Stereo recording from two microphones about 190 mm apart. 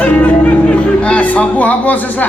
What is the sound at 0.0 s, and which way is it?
Speech, 10° left (ahead or behind).